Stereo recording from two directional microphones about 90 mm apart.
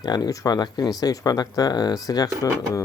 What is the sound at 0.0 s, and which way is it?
Speech, 50° left (ahead or behind).